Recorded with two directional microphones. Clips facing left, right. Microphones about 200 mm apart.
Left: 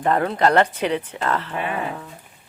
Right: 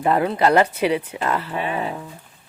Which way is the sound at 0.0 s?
10° right (ahead or behind).